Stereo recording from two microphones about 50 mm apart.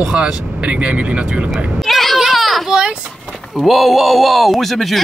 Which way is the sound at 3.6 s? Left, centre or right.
Centre.